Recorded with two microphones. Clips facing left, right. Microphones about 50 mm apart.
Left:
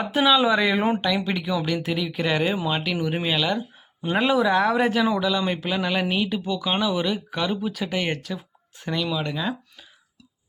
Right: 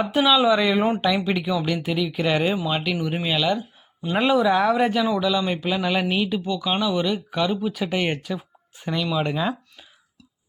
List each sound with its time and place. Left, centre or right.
0.0 s speech: centre
9.1 s speech: centre